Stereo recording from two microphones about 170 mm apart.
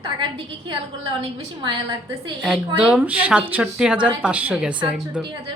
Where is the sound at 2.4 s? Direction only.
5° right (ahead or behind).